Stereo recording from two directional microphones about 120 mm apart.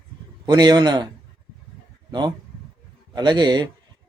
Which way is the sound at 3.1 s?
35° right (ahead or behind).